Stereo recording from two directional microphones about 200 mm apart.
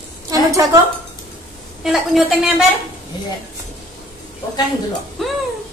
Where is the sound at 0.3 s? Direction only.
15° right (ahead or behind).